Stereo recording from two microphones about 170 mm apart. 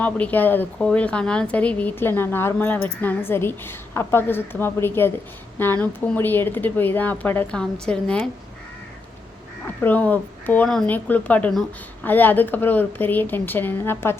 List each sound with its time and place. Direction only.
0.0 s a woman's voice: 10° left (ahead or behind)
9.8 s a woman's voice: 10° left (ahead or behind)